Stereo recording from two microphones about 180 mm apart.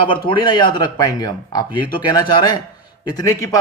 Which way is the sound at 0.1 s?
25° left (ahead or behind).